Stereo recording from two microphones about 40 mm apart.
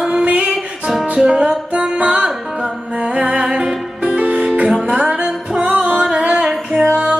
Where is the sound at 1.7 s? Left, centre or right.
Right.